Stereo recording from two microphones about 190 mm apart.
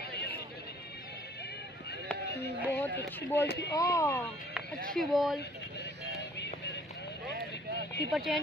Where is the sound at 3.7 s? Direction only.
15° left (ahead or behind).